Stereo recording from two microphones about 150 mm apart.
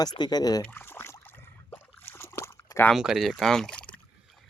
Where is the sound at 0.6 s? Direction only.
15° left (ahead or behind).